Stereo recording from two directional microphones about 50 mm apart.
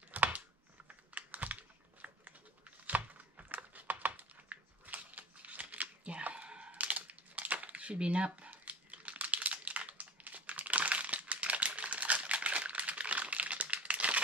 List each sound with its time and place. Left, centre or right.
0.1 s computer keyboard: right
0.8 s typing: right
2.9 s computer keyboard: right